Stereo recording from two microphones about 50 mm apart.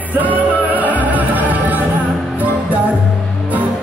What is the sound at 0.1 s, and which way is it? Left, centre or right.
Music, right.